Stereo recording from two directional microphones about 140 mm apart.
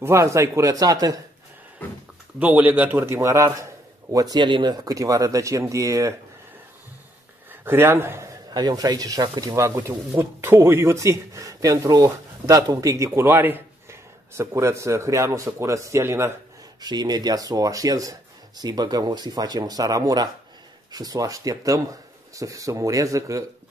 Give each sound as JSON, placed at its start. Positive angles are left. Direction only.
{"t": 0.0, "sound": "a man's voice", "side_deg": -20}
{"t": 2.3, "sound": "a man's voice", "side_deg": -10}
{"t": 7.6, "sound": "a man's voice", "side_deg": -15}
{"t": 16.8, "sound": "a man's voice", "side_deg": -30}